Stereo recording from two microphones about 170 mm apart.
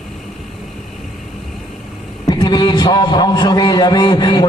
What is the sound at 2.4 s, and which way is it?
A man's voice, 25° left (ahead or behind).